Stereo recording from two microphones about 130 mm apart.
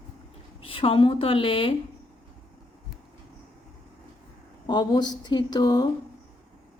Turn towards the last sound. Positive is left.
turn(degrees=30)  # may be behind; listen again after turning